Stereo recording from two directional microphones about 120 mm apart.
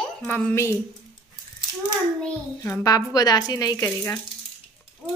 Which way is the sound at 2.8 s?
30° left (ahead or behind).